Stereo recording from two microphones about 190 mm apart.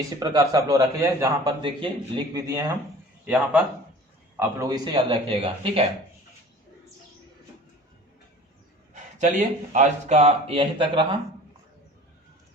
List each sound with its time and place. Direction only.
0.2 s a man's voice: 20° right (ahead or behind)
3.2 s a man's voice: 5° right (ahead or behind); by 5.8 s 25° right (ahead or behind)
8.9 s speech: 40° right (ahead or behind); by 11.2 s 25° right (ahead or behind)